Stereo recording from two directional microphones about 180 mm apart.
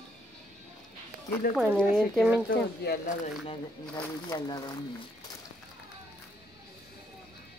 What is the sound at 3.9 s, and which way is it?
Speech, 20° left (ahead or behind).